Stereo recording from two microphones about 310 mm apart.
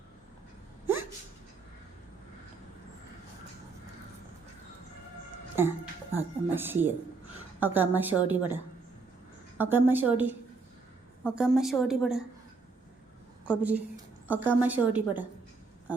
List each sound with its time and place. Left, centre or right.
5.5 s a woman's voice: centre
13.4 s a woman's voice: centre